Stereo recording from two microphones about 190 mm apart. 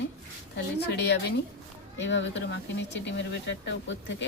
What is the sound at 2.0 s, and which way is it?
Speech, 70° left (ahead or behind).